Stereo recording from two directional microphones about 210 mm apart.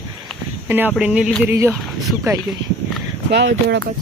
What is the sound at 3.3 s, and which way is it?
Speech, 55° right (ahead or behind).